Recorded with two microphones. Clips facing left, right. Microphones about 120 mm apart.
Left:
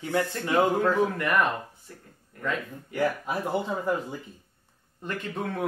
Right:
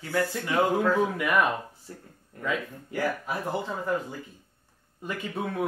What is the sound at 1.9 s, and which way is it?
Speech, 30° right (ahead or behind).